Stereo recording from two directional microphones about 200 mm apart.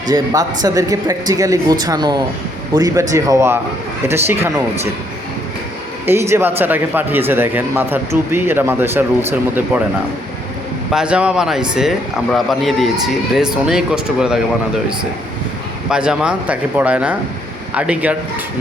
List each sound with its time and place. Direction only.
0.1 s speech: 20° right (ahead or behind)
6.1 s speech: 10° right (ahead or behind)
10.9 s a man's voice: 5° right (ahead or behind)
15.9 s speech: 5° right (ahead or behind)